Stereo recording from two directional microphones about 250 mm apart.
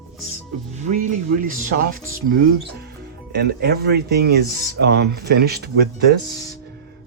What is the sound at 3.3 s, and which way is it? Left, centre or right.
Speech, right.